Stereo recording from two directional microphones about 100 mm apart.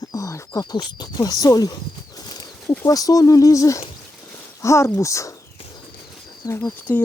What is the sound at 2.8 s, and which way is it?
Speech, 35° left (ahead or behind).